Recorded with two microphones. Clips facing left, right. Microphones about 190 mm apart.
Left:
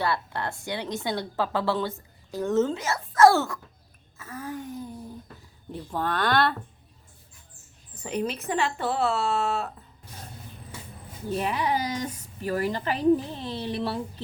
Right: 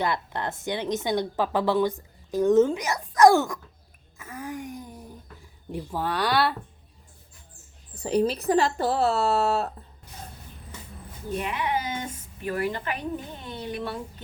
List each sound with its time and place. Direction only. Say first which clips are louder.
0.0 s a woman's voice: right 1 dB; 20° right (ahead or behind)
4.2 s wail: even; 15° right (ahead or behind)
5.7 s a woman's voice: even; 10° right (ahead or behind)
7.9 s speech: right 6 dB; 35° right (ahead or behind)
11.3 s a woman's voice: left 2 dB; 35° left (ahead or behind)